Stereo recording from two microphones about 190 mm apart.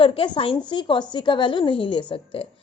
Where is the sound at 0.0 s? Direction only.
30° left (ahead or behind).